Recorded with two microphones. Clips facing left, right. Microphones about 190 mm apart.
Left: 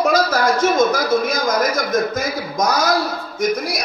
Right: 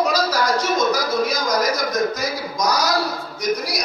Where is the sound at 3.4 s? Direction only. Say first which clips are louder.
Left 3 dB; 50° left (ahead or behind).